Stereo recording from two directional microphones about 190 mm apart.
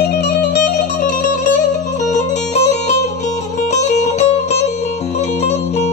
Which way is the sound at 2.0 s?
35° left (ahead or behind).